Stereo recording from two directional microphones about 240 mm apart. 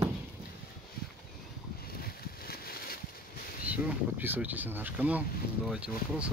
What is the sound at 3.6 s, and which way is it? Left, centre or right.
Speech, centre.